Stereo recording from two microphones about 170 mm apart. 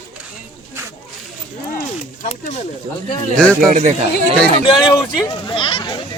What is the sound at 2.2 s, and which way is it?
Speech, 40° left (ahead or behind).